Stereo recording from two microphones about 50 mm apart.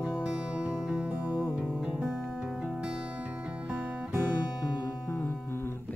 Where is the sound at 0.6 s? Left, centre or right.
Right.